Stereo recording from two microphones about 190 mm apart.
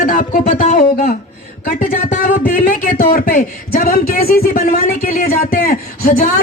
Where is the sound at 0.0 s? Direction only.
45° left (ahead or behind).